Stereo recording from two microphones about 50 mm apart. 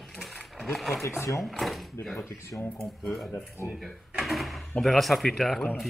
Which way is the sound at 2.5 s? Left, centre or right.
Left.